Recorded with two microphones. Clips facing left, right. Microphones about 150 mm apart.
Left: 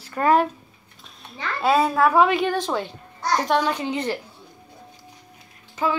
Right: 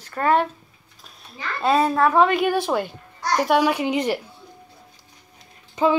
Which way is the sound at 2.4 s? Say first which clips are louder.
Right 2 dB; 10° right (ahead or behind).